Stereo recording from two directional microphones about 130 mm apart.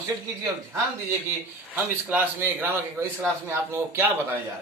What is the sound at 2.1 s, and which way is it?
A man's voice, 15° right (ahead or behind).